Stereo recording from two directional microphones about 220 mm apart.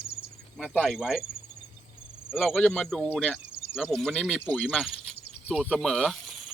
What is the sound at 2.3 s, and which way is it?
Speech, 10° left (ahead or behind).